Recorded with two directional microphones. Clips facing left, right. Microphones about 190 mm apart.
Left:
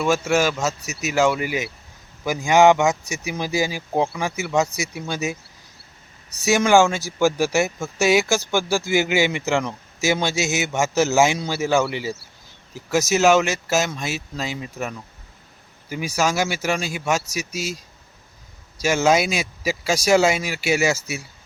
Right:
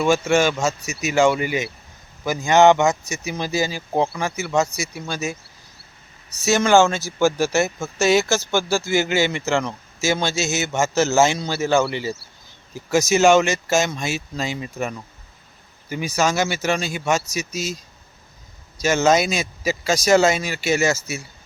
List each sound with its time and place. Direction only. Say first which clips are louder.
0.0 s speech: right 2 dB; 5° left (ahead or behind)
18.8 s speech: right 1 dB; 10° left (ahead or behind)